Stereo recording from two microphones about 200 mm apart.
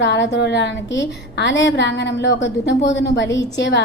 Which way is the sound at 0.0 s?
60° left (ahead or behind).